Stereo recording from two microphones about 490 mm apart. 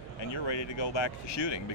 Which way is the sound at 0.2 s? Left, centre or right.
Left.